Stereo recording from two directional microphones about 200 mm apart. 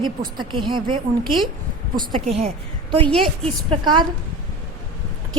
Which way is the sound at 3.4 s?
25° right (ahead or behind).